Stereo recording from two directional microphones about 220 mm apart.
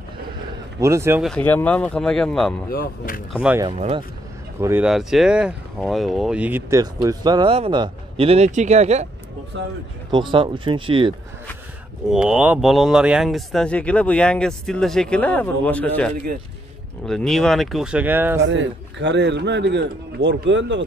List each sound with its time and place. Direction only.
0.7 s speech: 15° right (ahead or behind)
1.3 s speech: 5° left (ahead or behind)
2.7 s speech: 40° left (ahead or behind)
3.3 s speech: 5° right (ahead or behind)
3.6 s speech: 25° right (ahead or behind)
4.6 s speech: 10° right (ahead or behind); by 9.0 s 30° right (ahead or behind)
10.1 s speech: 20° right (ahead or behind)
12.1 s speech: 5° right (ahead or behind)
18.4 s speech: 55° right (ahead or behind)